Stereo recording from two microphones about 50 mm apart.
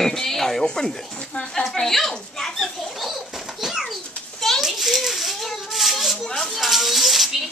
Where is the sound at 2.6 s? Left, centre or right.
Centre.